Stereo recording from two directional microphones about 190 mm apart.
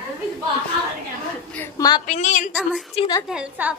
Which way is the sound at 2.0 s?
40° left (ahead or behind).